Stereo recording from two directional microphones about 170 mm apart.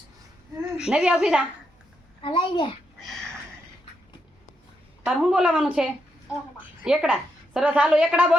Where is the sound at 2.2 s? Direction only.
25° left (ahead or behind).